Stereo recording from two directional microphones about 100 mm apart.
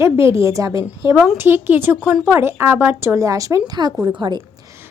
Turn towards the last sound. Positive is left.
turn(degrees=-50)  # may be behind; listen again after turning